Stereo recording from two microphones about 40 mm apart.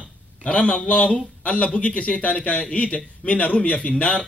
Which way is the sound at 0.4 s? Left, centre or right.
Left.